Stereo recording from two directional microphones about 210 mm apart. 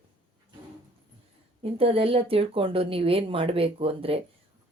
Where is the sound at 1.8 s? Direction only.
25° right (ahead or behind).